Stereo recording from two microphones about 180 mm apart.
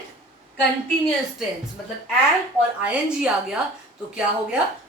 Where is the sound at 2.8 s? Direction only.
5° right (ahead or behind).